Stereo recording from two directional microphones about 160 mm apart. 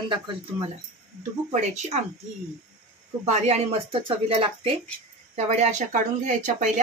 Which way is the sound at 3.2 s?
45° right (ahead or behind).